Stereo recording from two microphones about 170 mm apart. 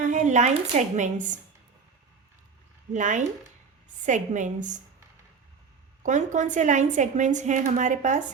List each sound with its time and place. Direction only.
0.0 s a woman's voice: 45° right (ahead or behind)
2.9 s a woman's voice: 45° right (ahead or behind)
6.0 s a woman's voice: 45° right (ahead or behind)